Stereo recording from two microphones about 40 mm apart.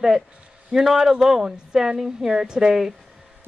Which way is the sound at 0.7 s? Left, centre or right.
Centre.